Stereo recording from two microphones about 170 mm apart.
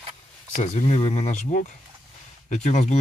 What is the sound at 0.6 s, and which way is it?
Speech, 45° left (ahead or behind).